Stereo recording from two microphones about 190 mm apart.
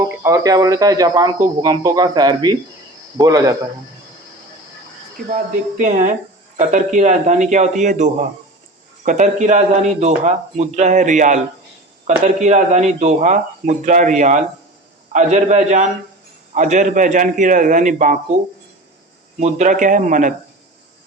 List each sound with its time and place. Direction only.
0.3 s a man's voice: 20° right (ahead or behind)
5.1 s a man's voice: 40° right (ahead or behind)
19.4 s speech: 40° right (ahead or behind)